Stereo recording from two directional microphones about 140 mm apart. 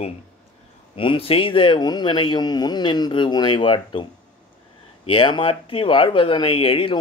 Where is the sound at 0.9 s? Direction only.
40° left (ahead or behind).